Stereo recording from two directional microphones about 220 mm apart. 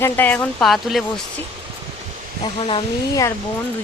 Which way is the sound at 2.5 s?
25° left (ahead or behind).